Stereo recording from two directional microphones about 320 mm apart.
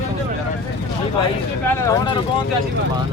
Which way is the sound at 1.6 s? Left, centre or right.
Centre.